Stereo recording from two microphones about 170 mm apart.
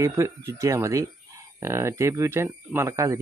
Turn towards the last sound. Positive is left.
turn(degrees=-20)  # may be behind; listen again after turning